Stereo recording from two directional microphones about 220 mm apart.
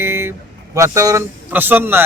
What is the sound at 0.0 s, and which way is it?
A man's voice, 10° right (ahead or behind).